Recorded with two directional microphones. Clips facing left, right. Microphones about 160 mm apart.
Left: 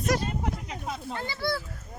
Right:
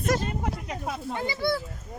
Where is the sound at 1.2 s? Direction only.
15° right (ahead or behind).